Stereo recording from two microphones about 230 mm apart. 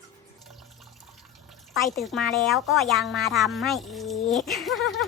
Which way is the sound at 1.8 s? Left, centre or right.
Centre.